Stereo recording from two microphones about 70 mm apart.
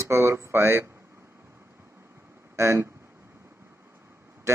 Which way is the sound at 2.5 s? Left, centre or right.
Right.